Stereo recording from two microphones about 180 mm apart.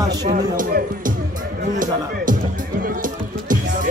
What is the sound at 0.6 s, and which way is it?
Speech, 50° right (ahead or behind).